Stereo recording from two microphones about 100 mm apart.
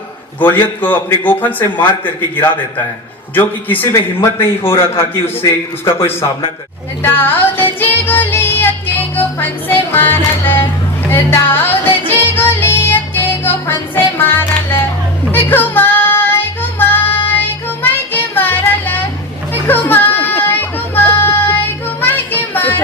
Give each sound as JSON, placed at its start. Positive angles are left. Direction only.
{"t": 0.3, "sound": "a man's voice", "side_deg": 20}
{"t": 7.0, "sound": "music", "side_deg": 20}
{"t": 16.7, "sound": "child singing", "side_deg": 20}
{"t": 17.8, "sound": "music", "side_deg": 20}
{"t": 19.6, "sound": "a sound", "side_deg": 20}